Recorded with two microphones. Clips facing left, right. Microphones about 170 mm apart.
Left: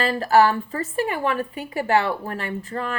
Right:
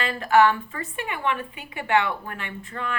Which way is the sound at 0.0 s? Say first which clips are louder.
Left 2 dB; 35° left (ahead or behind).